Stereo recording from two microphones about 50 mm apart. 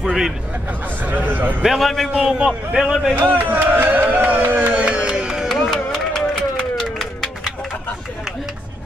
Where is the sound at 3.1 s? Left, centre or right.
Right; by 5.4 s centre.